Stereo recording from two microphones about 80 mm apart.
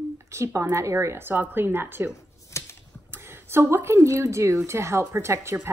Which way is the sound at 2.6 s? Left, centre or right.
Left.